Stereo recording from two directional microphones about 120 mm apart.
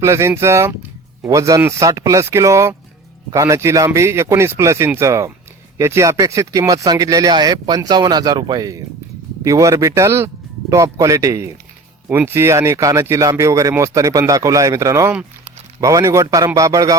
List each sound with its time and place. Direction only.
0.0 s speech: 25° right (ahead or behind)
12.0 s speech: 15° right (ahead or behind)